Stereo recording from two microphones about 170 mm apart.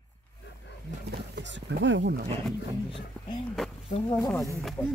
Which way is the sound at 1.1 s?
90° right.